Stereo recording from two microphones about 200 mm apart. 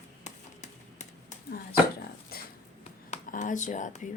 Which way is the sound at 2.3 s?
50° left (ahead or behind).